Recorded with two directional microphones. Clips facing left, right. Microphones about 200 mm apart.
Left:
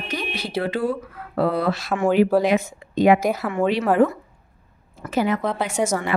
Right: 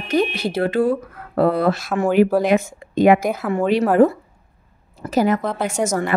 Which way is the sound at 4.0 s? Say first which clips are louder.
Right 4 dB; 40° right (ahead or behind).